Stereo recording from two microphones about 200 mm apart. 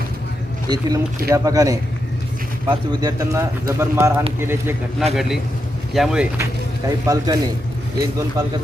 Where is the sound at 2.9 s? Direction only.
20° right (ahead or behind).